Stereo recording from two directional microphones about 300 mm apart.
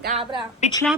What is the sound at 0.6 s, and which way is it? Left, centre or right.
Speech, centre.